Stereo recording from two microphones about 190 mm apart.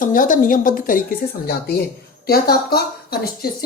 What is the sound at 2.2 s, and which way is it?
A woman's voice, 55° left (ahead or behind).